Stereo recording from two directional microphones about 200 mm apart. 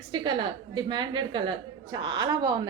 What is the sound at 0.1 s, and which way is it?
A woman's voice, 25° right (ahead or behind).